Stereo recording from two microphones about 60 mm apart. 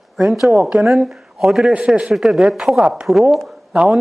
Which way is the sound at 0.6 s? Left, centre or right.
Centre.